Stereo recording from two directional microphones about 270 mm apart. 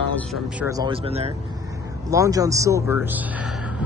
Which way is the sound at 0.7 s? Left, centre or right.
Centre.